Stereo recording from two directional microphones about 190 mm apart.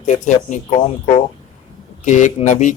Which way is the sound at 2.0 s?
40° left (ahead or behind).